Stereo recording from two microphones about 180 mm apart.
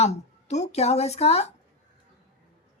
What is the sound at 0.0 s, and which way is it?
A woman's voice, 40° left (ahead or behind).